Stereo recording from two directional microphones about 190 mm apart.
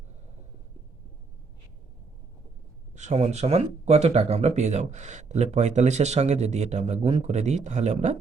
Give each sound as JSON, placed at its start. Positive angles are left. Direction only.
{"t": 2.9, "sound": "speech", "side_deg": -40}